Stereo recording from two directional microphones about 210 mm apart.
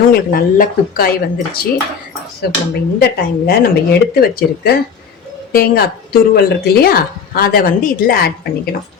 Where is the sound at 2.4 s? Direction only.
50° left (ahead or behind).